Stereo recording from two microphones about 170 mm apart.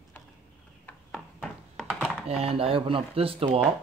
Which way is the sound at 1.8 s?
Centre (ahead or behind).